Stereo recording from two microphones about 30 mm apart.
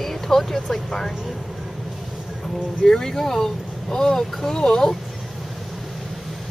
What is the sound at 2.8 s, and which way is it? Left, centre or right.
Speech, centre.